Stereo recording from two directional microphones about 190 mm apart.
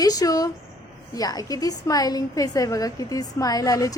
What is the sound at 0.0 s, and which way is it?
A woman's voice, 20° left (ahead or behind).